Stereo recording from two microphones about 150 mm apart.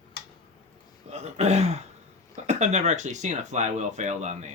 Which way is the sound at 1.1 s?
50° right (ahead or behind).